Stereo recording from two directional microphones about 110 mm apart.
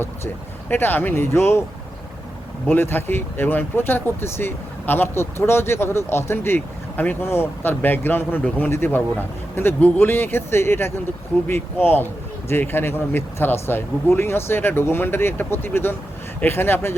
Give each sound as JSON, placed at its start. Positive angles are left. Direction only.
{"t": 0.7, "sound": "speech", "side_deg": 20}
{"t": 2.6, "sound": "speech", "side_deg": 20}